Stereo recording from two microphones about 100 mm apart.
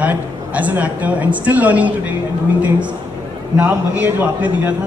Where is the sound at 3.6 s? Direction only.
15° right (ahead or behind).